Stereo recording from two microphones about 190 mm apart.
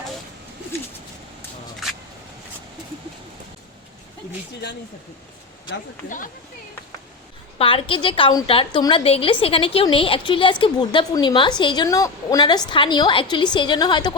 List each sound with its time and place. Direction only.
6.1 s speech: 45° left (ahead or behind)
7.6 s a woman's voice: 30° left (ahead or behind)